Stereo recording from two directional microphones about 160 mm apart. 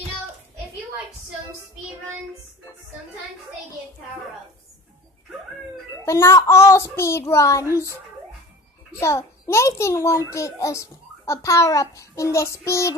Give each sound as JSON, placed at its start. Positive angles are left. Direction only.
{"t": 6.0, "sound": "a child's voice", "side_deg": 15}
{"t": 9.0, "sound": "a child's voice", "side_deg": 15}